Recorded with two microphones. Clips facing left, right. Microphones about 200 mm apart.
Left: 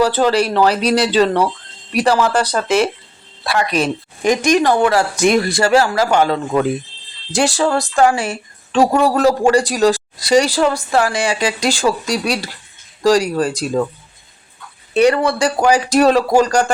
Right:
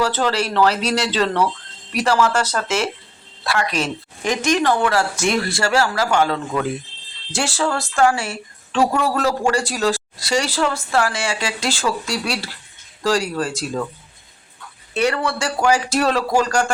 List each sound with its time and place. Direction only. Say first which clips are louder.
0.0 s speech: left 6 dB; 15° left (ahead or behind)
4.2 s speech: left 5 dB; 15° left (ahead or behind)
8.9 s a man's voice: left 6 dB; 35° left (ahead or behind)
9.5 s speech: left 6 dB; 15° left (ahead or behind)
14.9 s speech: left 7 dB; 15° left (ahead or behind)